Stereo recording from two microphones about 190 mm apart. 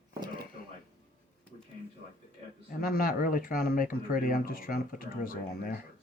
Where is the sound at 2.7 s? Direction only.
50° left (ahead or behind).